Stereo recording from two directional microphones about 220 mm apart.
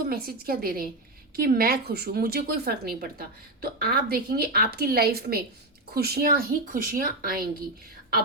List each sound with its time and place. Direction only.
0.1 s a woman's voice: 40° right (ahead or behind)